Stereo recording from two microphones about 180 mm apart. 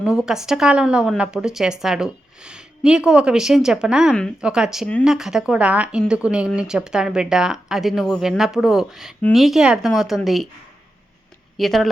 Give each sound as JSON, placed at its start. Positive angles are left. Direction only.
{"t": 0.0, "sound": "a woman's voice", "side_deg": -5}
{"t": 11.5, "sound": "a woman's voice", "side_deg": 0}